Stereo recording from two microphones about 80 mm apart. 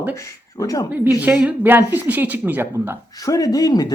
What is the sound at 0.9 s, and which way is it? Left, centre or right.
Speech, right.